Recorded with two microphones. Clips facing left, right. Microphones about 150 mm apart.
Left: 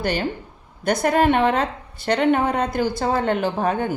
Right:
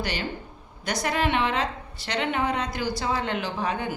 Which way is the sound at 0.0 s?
50° left (ahead or behind).